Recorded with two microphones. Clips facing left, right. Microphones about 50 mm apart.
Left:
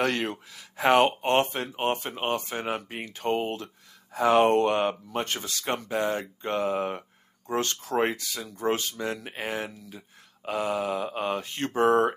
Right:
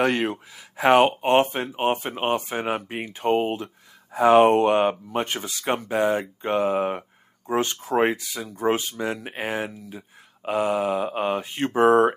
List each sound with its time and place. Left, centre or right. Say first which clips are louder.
0.0 s speech: right 5 dB; centre